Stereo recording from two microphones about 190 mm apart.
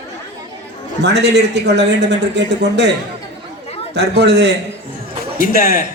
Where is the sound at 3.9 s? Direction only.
65° right (ahead or behind).